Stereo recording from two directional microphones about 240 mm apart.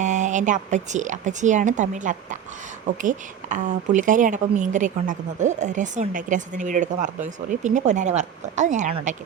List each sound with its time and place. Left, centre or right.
0.0 s a woman's voice: right